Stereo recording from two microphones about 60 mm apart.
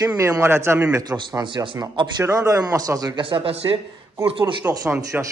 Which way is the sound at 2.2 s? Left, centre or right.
Right.